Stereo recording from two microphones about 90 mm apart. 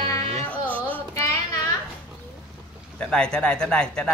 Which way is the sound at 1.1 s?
35° left (ahead or behind).